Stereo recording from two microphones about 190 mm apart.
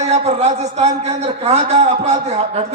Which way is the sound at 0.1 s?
35° right (ahead or behind).